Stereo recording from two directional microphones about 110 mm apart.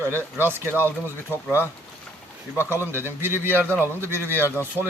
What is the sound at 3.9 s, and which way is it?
Speech, 20° left (ahead or behind).